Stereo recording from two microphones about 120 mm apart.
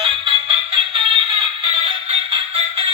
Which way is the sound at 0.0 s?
50° right (ahead or behind).